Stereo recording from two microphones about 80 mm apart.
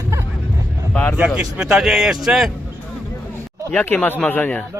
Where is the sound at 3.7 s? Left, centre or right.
Centre.